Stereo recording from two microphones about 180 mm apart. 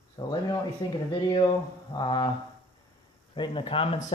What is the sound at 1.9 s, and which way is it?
Speech, 25° left (ahead or behind).